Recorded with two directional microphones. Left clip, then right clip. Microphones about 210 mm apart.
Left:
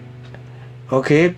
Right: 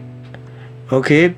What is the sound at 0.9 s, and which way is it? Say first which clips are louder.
Speech: right 2 dB; 35° right (ahead or behind).